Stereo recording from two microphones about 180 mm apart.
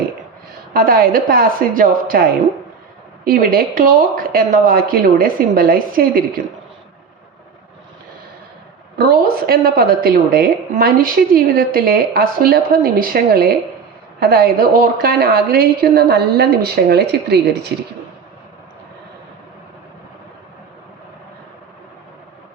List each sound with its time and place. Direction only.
0.7 s speech: 55° right (ahead or behind)
3.2 s speech: 55° right (ahead or behind)
9.0 s a woman's voice: 55° right (ahead or behind)